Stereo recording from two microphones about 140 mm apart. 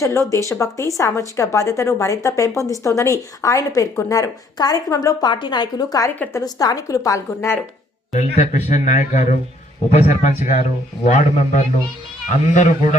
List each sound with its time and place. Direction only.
0.0 s a woman's voice: 20° left (ahead or behind)
8.1 s a man's voice: 60° left (ahead or behind)